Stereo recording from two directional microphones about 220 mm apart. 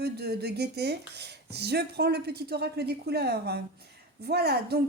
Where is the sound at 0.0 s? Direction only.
45° right (ahead or behind).